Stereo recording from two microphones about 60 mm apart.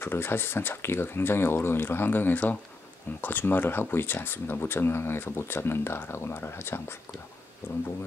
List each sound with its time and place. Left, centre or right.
0.0 s speech: left